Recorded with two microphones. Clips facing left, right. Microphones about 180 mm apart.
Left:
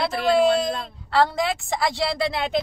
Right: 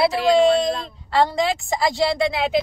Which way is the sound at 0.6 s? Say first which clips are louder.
Right 3 dB; centre (ahead or behind).